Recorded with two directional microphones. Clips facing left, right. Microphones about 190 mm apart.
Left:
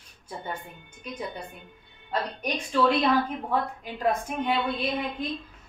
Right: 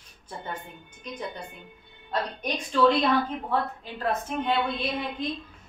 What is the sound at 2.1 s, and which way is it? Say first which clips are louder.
A woman's voice: even; 5° left (ahead or behind).